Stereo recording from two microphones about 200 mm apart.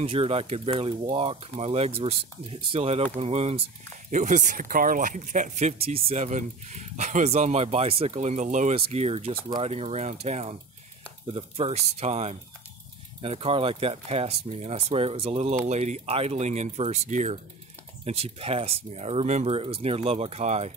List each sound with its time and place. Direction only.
0.0 s speech: 30° right (ahead or behind)